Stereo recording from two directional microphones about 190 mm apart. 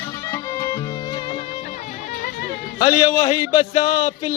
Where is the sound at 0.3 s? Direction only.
15° left (ahead or behind).